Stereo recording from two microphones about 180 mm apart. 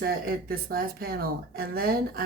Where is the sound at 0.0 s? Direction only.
60° right (ahead or behind).